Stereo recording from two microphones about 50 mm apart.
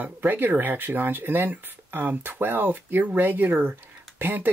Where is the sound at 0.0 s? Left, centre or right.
Right.